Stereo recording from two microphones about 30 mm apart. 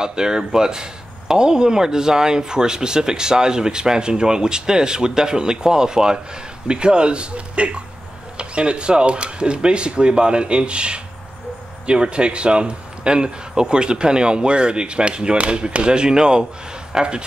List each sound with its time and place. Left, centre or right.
0.0 s speech: right
16.9 s speech: centre